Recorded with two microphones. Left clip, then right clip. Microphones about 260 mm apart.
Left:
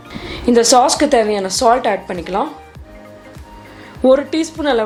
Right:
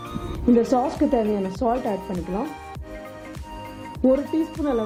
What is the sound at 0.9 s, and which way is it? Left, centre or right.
Speech, centre.